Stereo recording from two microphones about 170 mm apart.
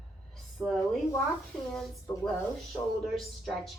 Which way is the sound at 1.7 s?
Centre (ahead or behind).